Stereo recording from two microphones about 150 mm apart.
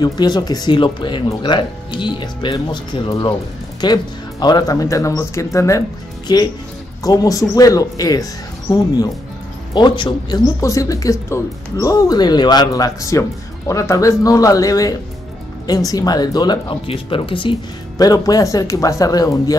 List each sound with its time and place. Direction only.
0.0 s speech: 25° left (ahead or behind)